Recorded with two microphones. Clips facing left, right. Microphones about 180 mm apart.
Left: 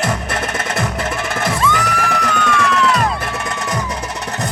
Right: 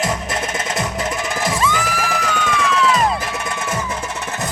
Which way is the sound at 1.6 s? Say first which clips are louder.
Left 2 dB; centre (ahead or behind).